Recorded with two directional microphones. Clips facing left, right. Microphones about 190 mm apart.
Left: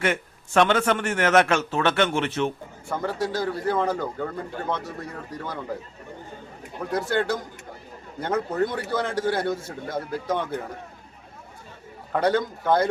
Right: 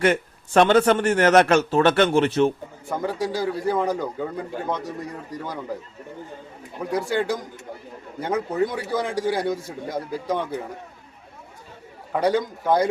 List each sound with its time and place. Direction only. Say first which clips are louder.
0.0 s a man's voice: right 5 dB; 35° right (ahead or behind)
2.9 s a man's voice: right 1 dB; 10° right (ahead or behind)
6.7 s a man's voice: right 1 dB; 10° right (ahead or behind)
12.1 s a man's voice: right 1 dB; 10° right (ahead or behind)